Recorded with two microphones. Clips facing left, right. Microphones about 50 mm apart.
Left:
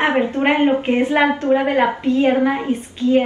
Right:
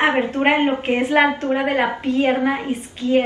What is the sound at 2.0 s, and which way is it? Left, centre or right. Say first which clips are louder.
A woman's voice: left 3 dB; right.